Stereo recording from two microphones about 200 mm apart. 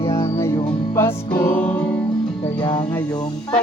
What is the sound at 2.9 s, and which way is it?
Music, 10° left (ahead or behind).